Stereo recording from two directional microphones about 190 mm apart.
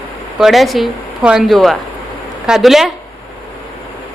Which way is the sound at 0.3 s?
Centre (ahead or behind).